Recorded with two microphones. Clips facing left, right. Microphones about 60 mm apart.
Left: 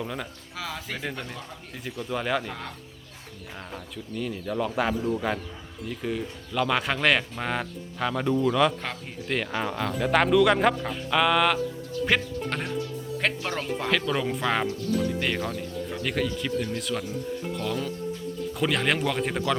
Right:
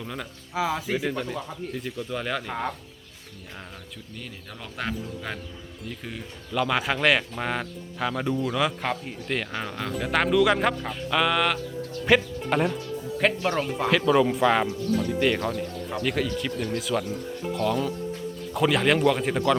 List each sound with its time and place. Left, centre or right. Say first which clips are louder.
0.0 s speech: left 2 dB; centre
0.5 s speech: right 9 dB; centre
1.0 s speech: right 5 dB; centre
2.5 s speech: right 7 dB; right
4.2 s speech: left 14 dB; centre